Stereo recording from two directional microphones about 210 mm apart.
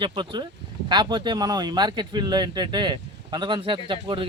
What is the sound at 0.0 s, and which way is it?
Speech, 20° right (ahead or behind).